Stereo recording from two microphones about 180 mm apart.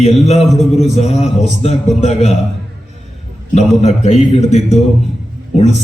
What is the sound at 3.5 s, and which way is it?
A man's voice, 40° left (ahead or behind).